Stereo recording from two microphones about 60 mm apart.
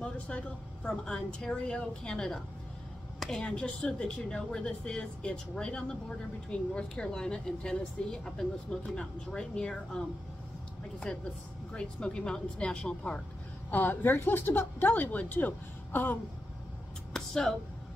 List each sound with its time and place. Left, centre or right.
0.0 s speech: centre
11.1 s speech: centre
13.7 s a woman's voice: left
17.1 s a sound: centre